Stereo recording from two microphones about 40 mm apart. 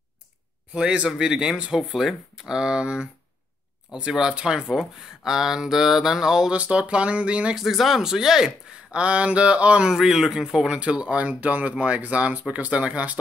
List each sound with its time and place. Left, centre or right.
1.2 s speech: centre
1.9 s speech: centre; by 3.1 s right
4.1 s speech: centre
6.5 s speech: right
7.5 s speech: centre; by 9.8 s right
9.8 s speech: centre
10.7 s speech: right